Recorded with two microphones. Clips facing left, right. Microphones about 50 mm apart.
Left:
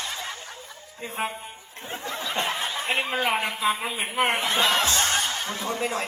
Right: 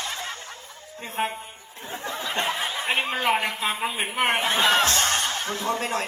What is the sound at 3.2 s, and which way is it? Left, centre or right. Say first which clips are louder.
A man's voice: right 1 dB; right.